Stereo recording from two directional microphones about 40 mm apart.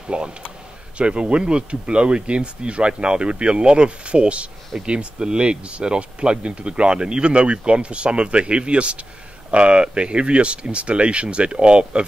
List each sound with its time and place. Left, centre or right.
0.1 s speech: right